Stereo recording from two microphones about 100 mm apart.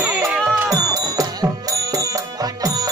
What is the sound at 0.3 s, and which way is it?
Music, 5° right (ahead or behind).